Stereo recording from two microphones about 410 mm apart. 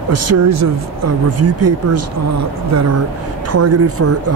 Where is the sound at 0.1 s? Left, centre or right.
Right.